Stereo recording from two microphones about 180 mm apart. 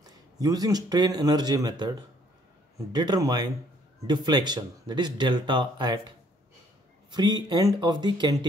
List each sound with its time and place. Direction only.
0.0 s speech: 20° right (ahead or behind)